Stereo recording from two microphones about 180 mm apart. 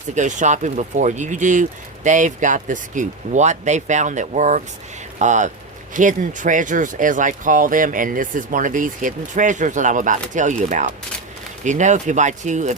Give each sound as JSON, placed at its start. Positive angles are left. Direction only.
{"t": 0.1, "sound": "speech", "side_deg": -45}